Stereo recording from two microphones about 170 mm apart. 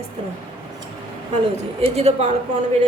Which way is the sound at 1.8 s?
35° right (ahead or behind).